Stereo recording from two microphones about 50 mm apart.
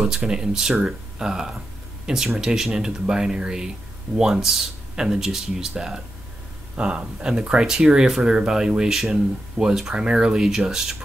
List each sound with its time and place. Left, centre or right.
0.0 s speech: centre
6.8 s speech: right